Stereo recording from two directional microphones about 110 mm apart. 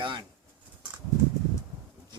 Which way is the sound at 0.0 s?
45° right (ahead or behind).